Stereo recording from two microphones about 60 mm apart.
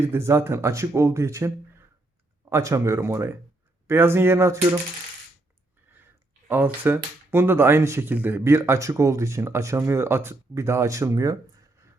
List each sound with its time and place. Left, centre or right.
0.0 s speech: right
6.5 s speech: right
8.1 s speech: right
8.4 s speech: right